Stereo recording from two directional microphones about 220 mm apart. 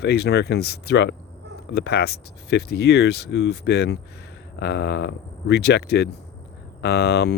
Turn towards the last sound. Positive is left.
turn(degrees=50)  # may be behind; listen again after turning